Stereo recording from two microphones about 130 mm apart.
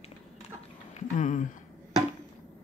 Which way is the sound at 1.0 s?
75° left (ahead or behind).